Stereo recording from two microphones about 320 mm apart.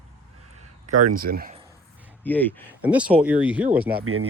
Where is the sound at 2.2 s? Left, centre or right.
Centre.